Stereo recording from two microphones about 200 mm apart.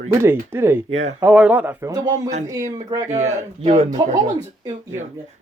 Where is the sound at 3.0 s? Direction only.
35° right (ahead or behind).